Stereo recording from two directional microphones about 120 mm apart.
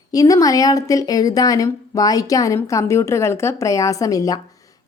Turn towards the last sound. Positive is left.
turn(degrees=30)  # may be behind; listen again after turning